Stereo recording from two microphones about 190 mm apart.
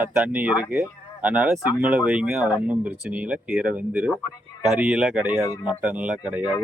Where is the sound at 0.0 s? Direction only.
5° right (ahead or behind).